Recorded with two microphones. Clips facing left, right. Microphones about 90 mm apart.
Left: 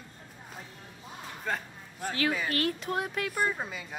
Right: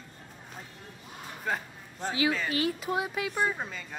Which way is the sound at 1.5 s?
5° right (ahead or behind).